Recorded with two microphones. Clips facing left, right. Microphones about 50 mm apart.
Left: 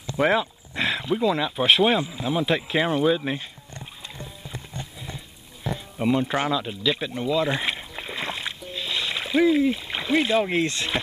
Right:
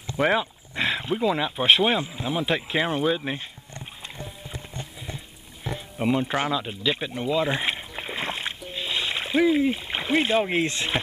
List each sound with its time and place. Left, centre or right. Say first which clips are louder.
0.2 s a sound: left 1 dB; centre
1.1 s speech: left 3 dB; centre
5.0 s music: even; centre
6.3 s speech: left 1 dB; centre
6.7 s splash: left 1 dB; centre
10.5 s speech: even; centre